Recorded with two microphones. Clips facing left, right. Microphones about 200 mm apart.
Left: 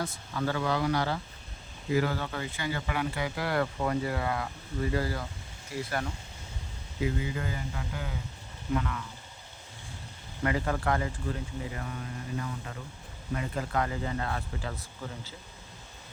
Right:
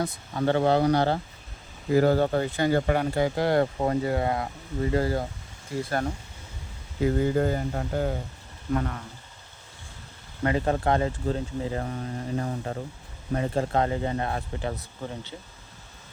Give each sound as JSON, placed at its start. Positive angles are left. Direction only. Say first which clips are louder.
{"t": 0.3, "sound": "speech", "louder": "right 8 dB", "side_deg": -35}
{"t": 5.9, "sound": "speech", "louder": "right 6 dB", "side_deg": -40}
{"t": 10.4, "sound": "speech", "louder": "right 5 dB", "side_deg": -25}
{"t": 13.3, "sound": "speech", "louder": "right 6 dB", "side_deg": -30}